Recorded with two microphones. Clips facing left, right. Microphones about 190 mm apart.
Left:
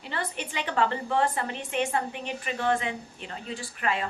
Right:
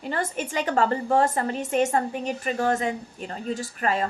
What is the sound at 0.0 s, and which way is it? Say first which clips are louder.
A woman's voice: right 6 dB; 45° right (ahead or behind).